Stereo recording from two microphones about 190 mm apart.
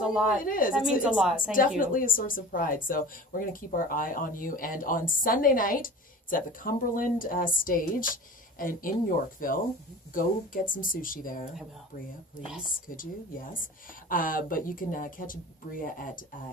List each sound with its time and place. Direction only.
0.0 s speech: 5° right (ahead or behind)
0.4 s speech: 45° left (ahead or behind)
0.7 s speech: 5° right (ahead or behind)
1.8 s speech: 45° left (ahead or behind)
14.1 s speech: 45° left (ahead or behind)